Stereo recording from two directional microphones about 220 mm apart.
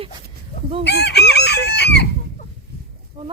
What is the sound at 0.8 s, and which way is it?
Chicken, 50° left (ahead or behind).